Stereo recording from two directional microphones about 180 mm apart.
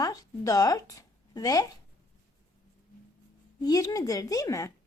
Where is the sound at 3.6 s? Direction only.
20° left (ahead or behind).